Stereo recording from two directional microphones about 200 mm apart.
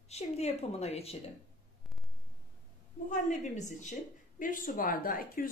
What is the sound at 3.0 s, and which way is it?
A woman's voice, 35° left (ahead or behind).